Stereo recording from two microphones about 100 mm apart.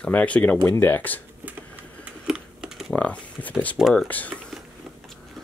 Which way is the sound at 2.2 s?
5° right (ahead or behind).